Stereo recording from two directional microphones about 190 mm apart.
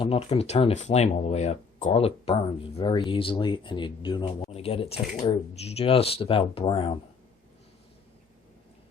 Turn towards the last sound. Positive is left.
turn(degrees=30)  # may be behind; listen again after turning